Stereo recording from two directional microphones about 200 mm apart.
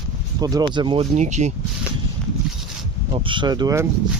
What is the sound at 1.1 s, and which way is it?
Speech, 35° right (ahead or behind).